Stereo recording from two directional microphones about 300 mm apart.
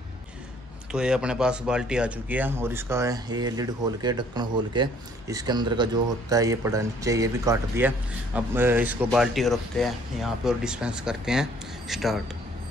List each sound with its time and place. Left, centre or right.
0.9 s speech: centre